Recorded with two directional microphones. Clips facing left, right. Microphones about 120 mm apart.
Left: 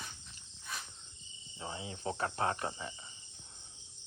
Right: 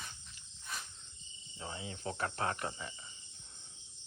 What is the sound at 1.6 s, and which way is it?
Cricket, 25° left (ahead or behind).